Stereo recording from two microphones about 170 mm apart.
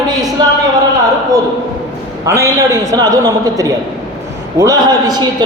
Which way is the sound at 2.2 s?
20° right (ahead or behind).